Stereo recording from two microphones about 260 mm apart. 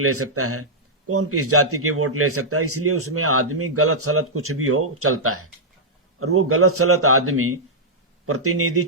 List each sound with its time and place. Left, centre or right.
0.0 s a man's voice: right